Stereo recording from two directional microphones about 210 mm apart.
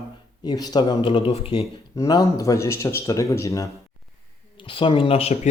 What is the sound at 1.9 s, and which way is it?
Speech, 15° left (ahead or behind).